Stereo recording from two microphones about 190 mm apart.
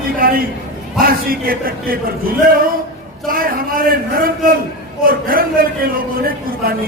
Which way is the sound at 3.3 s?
50° right (ahead or behind).